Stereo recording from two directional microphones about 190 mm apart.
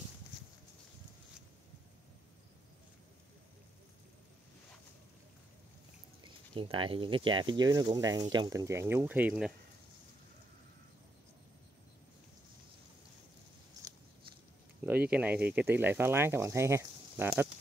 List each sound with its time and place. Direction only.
6.2 s speech: 25° right (ahead or behind); by 9.5 s 10° right (ahead or behind)
14.8 s speech: 10° right (ahead or behind)